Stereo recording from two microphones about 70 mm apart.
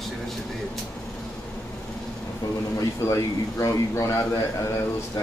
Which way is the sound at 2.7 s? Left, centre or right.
Left.